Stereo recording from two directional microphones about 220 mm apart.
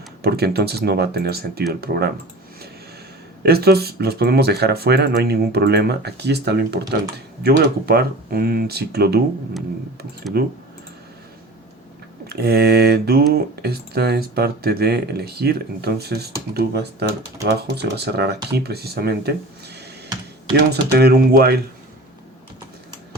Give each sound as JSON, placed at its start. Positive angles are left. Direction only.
{"t": 0.2, "sound": "speech", "side_deg": -45}
{"t": 3.4, "sound": "speech", "side_deg": -45}
{"t": 10.3, "sound": "speech", "side_deg": -45}
{"t": 12.3, "sound": "speech", "side_deg": -45}